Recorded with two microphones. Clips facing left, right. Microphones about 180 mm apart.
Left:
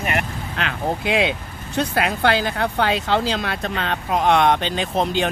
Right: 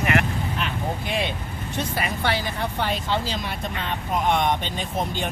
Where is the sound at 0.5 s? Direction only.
90° left.